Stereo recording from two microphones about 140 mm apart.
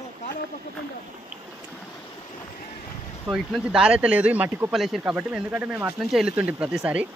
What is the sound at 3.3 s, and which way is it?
Speech, 5° right (ahead or behind).